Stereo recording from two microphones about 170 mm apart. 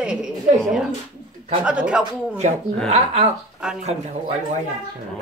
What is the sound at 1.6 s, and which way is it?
Speech, 5° right (ahead or behind).